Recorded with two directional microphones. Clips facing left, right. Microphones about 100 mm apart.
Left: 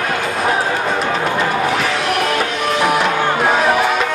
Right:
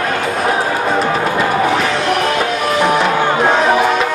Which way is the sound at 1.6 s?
Centre (ahead or behind).